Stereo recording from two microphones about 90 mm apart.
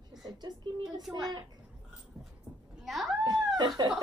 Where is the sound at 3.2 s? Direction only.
50° right (ahead or behind).